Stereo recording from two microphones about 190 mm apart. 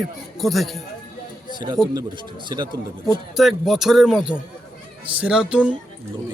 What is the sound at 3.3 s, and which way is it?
A man's voice, centre (ahead or behind).